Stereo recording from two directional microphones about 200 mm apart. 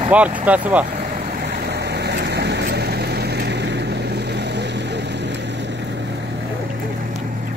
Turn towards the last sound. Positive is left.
turn(degrees=-60)  # may be behind; listen again after turning